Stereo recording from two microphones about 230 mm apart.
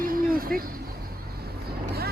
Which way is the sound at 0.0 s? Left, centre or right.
Right.